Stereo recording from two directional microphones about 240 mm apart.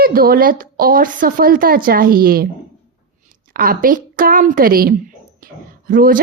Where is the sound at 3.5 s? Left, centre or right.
Right.